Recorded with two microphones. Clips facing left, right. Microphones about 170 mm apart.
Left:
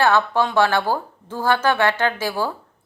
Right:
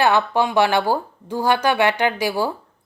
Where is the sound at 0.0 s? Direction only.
15° right (ahead or behind).